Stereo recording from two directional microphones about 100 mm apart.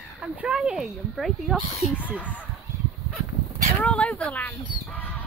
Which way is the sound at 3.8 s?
10° left (ahead or behind).